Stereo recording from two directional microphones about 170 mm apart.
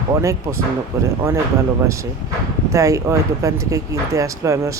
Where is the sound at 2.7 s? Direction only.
20° right (ahead or behind).